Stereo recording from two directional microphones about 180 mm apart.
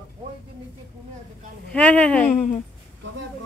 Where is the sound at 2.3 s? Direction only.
45° left (ahead or behind).